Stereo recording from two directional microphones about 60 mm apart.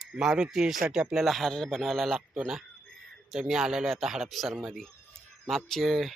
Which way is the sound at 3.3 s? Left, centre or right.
Centre.